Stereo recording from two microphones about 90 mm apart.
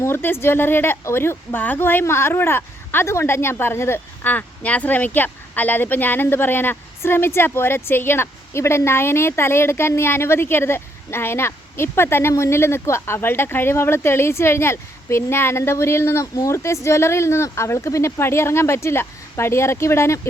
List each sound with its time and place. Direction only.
0.0 s speech: 25° left (ahead or behind)